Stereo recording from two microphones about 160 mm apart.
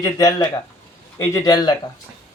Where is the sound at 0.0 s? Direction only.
25° left (ahead or behind).